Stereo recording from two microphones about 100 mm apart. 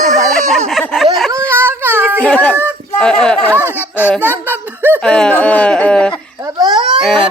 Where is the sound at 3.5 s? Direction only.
20° right (ahead or behind).